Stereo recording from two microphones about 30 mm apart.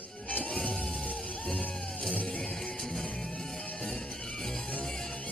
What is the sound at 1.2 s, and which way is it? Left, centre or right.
Music, left.